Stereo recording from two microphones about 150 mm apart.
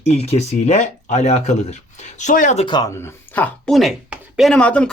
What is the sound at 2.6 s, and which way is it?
Speech, 30° left (ahead or behind).